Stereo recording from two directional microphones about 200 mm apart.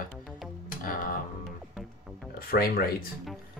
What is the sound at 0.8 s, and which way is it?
Music, 45° left (ahead or behind).